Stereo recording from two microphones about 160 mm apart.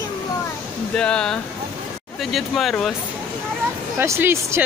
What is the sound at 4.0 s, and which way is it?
Speech, 15° right (ahead or behind).